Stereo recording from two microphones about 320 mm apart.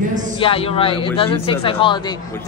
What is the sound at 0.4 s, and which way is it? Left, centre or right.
A man's voice, centre.